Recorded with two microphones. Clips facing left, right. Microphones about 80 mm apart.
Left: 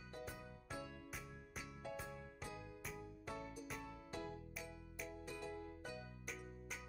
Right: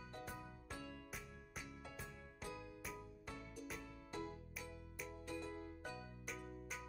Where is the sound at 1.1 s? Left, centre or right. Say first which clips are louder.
Left 1 dB; centre.